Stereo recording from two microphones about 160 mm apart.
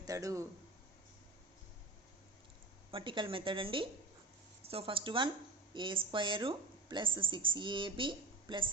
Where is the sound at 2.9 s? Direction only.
30° right (ahead or behind).